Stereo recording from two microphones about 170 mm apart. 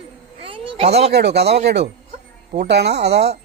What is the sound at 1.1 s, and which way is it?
Speech, 75° right (ahead or behind).